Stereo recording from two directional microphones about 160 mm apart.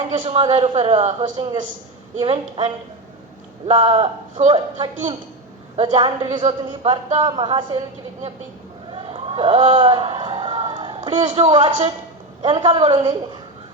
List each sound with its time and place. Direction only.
0.1 s a woman's voice: 35° right (ahead or behind)
8.9 s a sound: 35° right (ahead or behind)
12.4 s a woman's voice: 30° right (ahead or behind)